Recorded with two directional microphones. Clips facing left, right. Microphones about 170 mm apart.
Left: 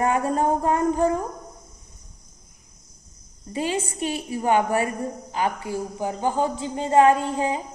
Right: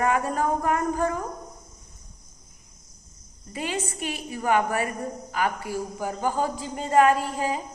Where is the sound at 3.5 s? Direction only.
30° left (ahead or behind).